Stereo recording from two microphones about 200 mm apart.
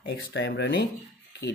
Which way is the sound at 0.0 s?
55° left (ahead or behind).